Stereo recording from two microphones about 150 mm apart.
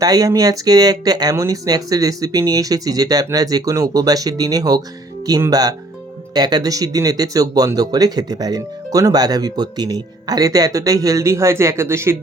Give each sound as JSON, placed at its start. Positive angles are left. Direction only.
{"t": 0.0, "sound": "speech", "side_deg": -25}